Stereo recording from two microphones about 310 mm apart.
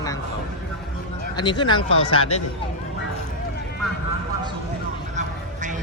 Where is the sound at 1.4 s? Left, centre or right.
Centre.